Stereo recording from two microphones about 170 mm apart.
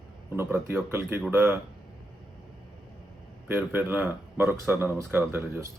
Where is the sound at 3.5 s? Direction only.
10° right (ahead or behind).